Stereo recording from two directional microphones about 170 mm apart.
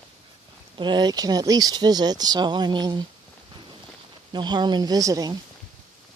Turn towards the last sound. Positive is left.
turn(degrees=-20)  # may be behind; listen again after turning